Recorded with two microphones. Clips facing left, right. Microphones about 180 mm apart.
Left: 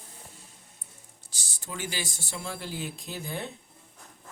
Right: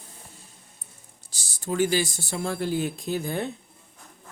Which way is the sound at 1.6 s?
45° right (ahead or behind).